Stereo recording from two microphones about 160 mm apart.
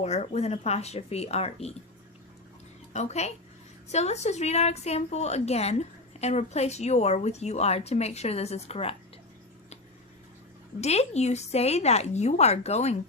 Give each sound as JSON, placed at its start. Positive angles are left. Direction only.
{"t": 0.0, "sound": "speech", "side_deg": 45}
{"t": 2.9, "sound": "speech", "side_deg": 45}
{"t": 10.8, "sound": "speech", "side_deg": 45}